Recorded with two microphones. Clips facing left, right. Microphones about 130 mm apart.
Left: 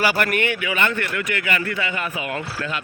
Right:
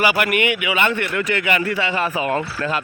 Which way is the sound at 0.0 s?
5° right (ahead or behind).